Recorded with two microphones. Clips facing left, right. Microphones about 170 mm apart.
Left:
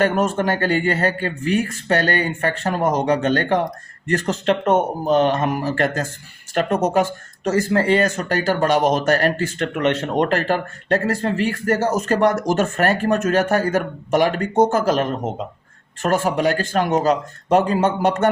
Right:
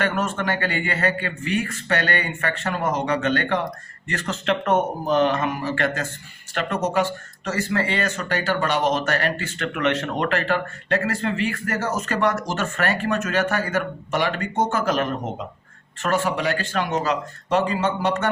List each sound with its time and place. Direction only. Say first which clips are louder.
0.0 s speech: left 6 dB; 40° left (ahead or behind)
4.6 s speech: left 3 dB; 25° left (ahead or behind); by 18.3 s 50° left (ahead or behind)